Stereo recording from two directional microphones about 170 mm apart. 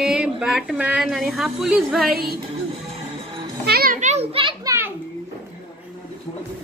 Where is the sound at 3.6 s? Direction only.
65° right (ahead or behind).